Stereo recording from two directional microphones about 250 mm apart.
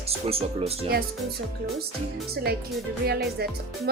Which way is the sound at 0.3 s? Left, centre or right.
Right.